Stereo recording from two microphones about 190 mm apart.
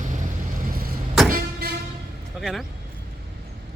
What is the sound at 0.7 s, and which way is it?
Vehicle, 50° right (ahead or behind).